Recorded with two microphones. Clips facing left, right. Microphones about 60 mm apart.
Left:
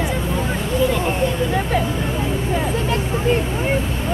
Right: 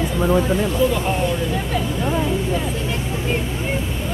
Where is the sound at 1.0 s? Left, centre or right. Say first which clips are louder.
Left 1 dB; left.